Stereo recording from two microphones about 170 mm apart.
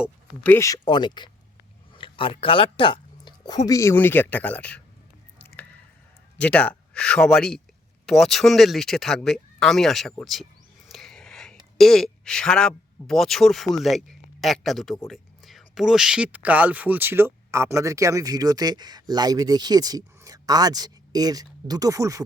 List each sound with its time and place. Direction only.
0.4 s speech: 15° left (ahead or behind)
6.4 s speech: 5° left (ahead or behind)
10.8 s a sound: centre (ahead or behind)
11.8 s speech: centre (ahead or behind); by 22.2 s 20° right (ahead or behind)